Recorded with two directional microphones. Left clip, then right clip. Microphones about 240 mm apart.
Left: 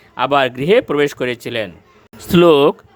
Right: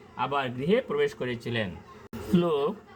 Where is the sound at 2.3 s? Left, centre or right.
Left.